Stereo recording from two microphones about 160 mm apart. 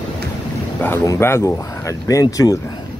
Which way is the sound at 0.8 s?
15° left (ahead or behind).